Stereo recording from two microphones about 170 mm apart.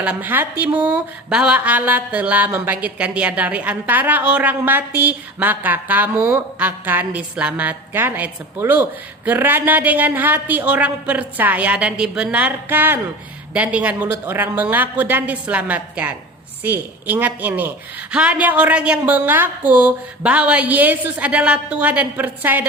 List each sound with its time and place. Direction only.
0.0 s speech: 10° right (ahead or behind)